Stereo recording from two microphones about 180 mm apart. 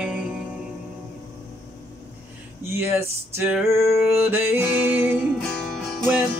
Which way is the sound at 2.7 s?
15° right (ahead or behind).